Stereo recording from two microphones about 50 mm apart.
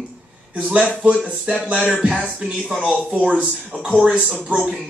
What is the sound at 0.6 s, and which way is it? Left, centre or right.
Speech, right.